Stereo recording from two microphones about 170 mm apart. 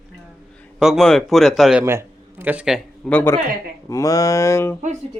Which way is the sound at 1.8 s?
15° right (ahead or behind).